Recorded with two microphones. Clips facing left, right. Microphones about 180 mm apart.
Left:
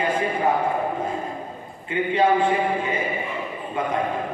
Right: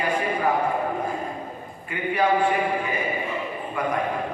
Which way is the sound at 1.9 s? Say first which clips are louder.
Left 3 dB; 25° left (ahead or behind).